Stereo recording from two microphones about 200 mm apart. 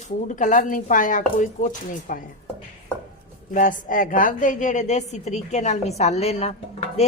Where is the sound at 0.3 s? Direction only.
40° left (ahead or behind).